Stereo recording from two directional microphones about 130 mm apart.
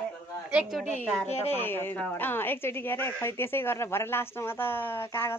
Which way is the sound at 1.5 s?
15° left (ahead or behind).